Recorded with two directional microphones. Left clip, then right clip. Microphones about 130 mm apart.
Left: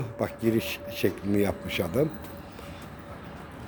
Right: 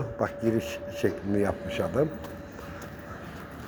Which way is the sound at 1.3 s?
50° left (ahead or behind).